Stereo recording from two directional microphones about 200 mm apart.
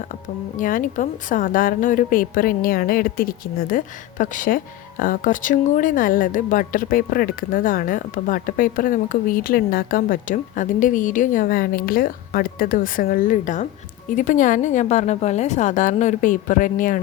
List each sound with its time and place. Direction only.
0.5 s a woman's voice: 40° left (ahead or behind)